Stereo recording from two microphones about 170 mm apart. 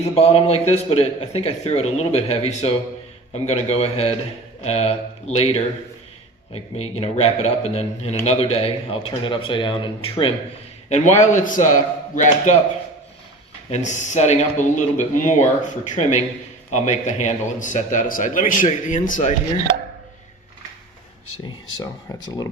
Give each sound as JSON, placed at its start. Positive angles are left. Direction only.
{"t": 0.0, "sound": "a man's voice", "side_deg": 35}
{"t": 6.5, "sound": "a man's voice", "side_deg": 35}
{"t": 10.8, "sound": "a man's voice", "side_deg": 40}
{"t": 13.7, "sound": "a man's voice", "side_deg": 40}
{"t": 21.4, "sound": "speech", "side_deg": 25}